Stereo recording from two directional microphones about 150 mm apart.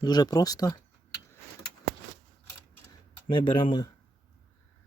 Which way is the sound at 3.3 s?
30° left (ahead or behind).